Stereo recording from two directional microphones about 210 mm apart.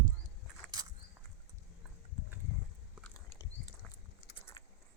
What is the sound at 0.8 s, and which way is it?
Patter, 20° right (ahead or behind).